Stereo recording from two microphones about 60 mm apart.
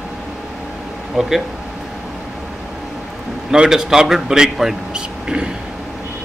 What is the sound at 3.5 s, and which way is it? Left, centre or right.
A man's voice, centre.